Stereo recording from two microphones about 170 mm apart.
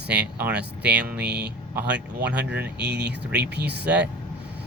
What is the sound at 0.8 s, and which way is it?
A man's voice, 5° right (ahead or behind).